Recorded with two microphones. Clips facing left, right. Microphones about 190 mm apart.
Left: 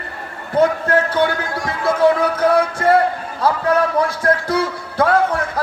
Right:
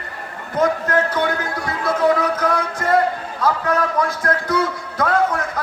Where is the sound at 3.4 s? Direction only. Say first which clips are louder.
Left 3 dB; 30° left (ahead or behind).